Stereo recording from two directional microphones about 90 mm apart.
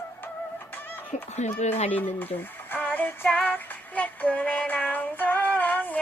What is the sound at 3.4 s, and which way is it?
Child singing, 20° left (ahead or behind).